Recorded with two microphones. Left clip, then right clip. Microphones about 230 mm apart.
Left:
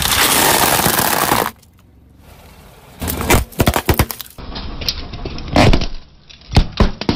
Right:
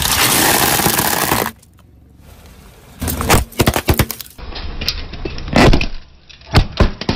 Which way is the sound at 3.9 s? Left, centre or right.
Centre.